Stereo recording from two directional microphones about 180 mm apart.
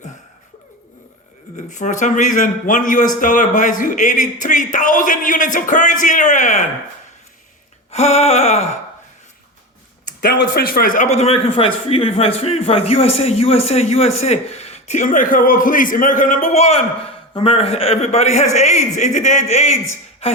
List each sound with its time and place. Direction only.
1.5 s speech: 45° left (ahead or behind)
7.9 s a man's voice: 35° left (ahead or behind)
10.1 s a sound: 50° left (ahead or behind)
10.3 s a man's voice: 60° left (ahead or behind); by 20.4 s 35° left (ahead or behind)